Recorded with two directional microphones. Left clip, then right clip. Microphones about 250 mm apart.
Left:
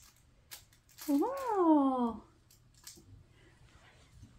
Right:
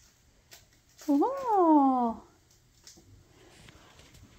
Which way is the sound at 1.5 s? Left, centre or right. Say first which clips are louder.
Right 6 dB; centre.